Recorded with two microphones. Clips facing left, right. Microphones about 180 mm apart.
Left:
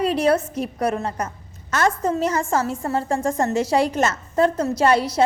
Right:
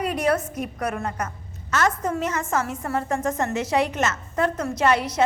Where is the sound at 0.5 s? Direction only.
30° left (ahead or behind).